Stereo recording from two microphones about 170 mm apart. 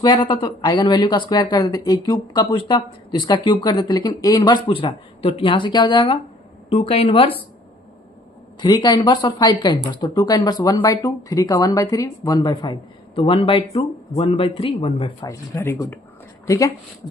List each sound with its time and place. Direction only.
0.0 s speech: 25° left (ahead or behind)
8.6 s speech: 25° left (ahead or behind)
15.3 s speech: 15° left (ahead or behind)